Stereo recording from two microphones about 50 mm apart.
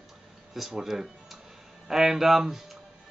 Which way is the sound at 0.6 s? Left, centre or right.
Centre.